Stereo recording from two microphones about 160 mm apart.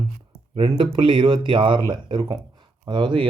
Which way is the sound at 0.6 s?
35° right (ahead or behind).